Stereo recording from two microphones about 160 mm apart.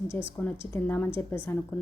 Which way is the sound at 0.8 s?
15° left (ahead or behind).